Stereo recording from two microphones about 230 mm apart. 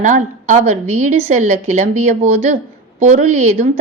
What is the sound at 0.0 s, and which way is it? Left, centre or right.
A woman's voice, right.